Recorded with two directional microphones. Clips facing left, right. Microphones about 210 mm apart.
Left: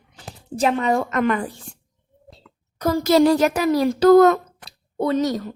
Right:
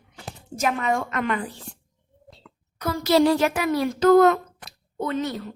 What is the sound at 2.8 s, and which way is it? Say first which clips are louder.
A woman's voice: left 3 dB; 45° left (ahead or behind).